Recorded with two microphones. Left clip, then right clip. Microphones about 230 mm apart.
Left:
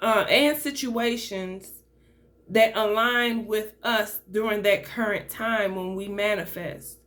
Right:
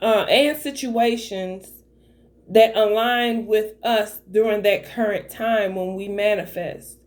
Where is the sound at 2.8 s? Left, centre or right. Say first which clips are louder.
Right 4 dB; centre.